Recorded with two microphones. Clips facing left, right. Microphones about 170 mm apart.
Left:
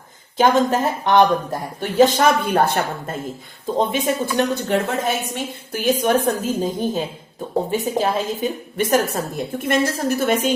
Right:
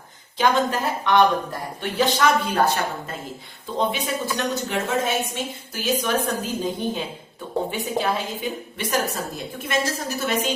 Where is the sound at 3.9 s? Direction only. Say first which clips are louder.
Left 5 dB; 50° left (ahead or behind).